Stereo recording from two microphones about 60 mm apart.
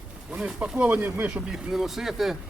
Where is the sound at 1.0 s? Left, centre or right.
Right.